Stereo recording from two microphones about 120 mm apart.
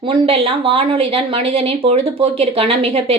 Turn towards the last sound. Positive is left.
turn(degrees=-55)  # may be behind; listen again after turning